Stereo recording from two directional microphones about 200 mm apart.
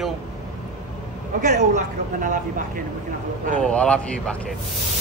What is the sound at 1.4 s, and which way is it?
Speech, 35° right (ahead or behind).